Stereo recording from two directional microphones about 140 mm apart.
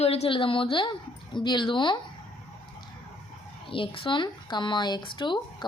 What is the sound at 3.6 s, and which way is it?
A woman's voice, 40° left (ahead or behind).